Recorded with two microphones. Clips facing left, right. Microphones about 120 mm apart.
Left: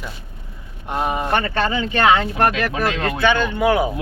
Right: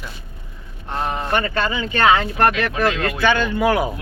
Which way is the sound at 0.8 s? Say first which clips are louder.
Left 2 dB; 10° left (ahead or behind).